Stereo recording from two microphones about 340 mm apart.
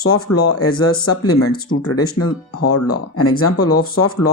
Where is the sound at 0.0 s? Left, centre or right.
Left.